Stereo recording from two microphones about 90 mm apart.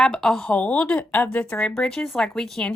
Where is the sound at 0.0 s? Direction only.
5° left (ahead or behind).